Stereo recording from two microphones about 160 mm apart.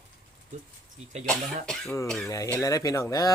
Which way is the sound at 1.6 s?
5° left (ahead or behind).